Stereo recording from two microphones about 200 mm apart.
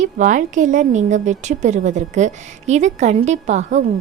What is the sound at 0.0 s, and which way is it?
A woman's voice, 40° right (ahead or behind).